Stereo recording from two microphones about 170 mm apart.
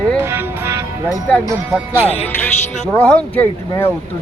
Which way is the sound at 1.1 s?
10° left (ahead or behind).